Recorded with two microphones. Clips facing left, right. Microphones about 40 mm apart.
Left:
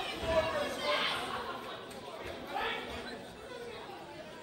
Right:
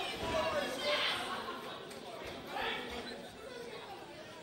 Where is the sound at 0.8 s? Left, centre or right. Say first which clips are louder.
Left 2 dB; centre.